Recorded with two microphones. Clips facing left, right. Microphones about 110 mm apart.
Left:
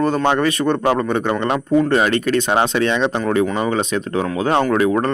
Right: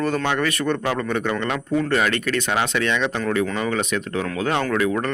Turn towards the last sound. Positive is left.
turn(degrees=30)  # may be behind; listen again after turning